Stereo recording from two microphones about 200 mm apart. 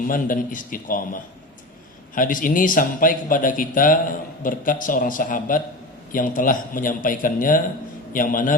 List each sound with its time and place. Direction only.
0.1 s a man's voice: 40° left (ahead or behind)